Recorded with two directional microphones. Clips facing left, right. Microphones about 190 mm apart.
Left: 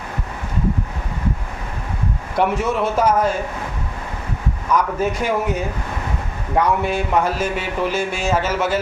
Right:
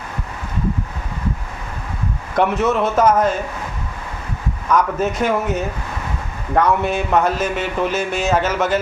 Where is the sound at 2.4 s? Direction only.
10° left (ahead or behind).